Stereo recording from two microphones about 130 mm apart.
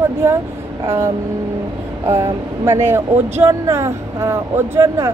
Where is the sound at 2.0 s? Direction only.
20° right (ahead or behind).